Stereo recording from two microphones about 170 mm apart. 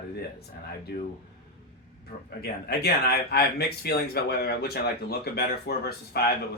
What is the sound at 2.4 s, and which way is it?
Speech, 70° left (ahead or behind).